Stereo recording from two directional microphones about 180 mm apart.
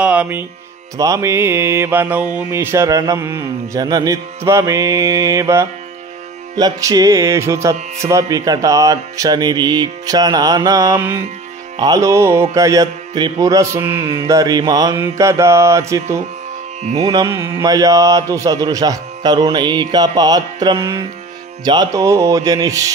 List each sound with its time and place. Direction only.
0.0 s speech: 5° right (ahead or behind)
0.9 s music: 20° right (ahead or behind)
11.7 s music: 20° right (ahead or behind)